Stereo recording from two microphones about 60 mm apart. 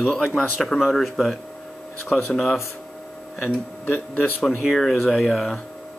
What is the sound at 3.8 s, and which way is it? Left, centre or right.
Speech, left.